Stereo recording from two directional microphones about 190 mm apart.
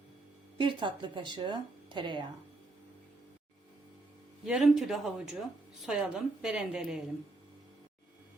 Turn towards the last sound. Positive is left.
turn(degrees=-5)  # may be behind; listen again after turning